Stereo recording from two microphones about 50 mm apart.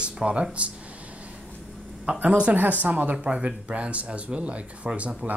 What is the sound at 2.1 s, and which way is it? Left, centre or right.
Speech, right.